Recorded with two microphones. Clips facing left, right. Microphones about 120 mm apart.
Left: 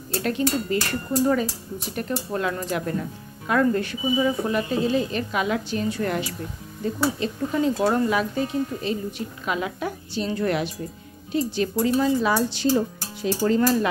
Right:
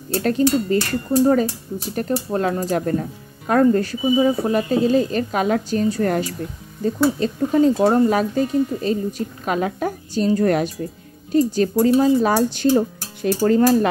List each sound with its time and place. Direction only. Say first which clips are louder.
0.2 s speech: right 6 dB; 40° right (ahead or behind)